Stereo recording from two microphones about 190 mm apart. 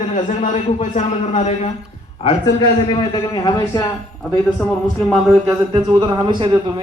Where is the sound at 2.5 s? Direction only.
25° left (ahead or behind).